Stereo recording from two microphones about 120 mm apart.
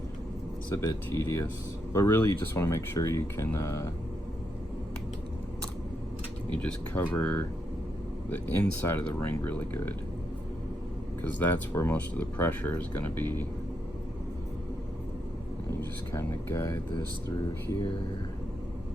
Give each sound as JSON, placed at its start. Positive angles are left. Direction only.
{"t": 0.7, "sound": "speech", "side_deg": 20}
{"t": 6.6, "sound": "speech", "side_deg": 15}
{"t": 11.2, "sound": "speech", "side_deg": 15}
{"t": 16.1, "sound": "speech", "side_deg": 25}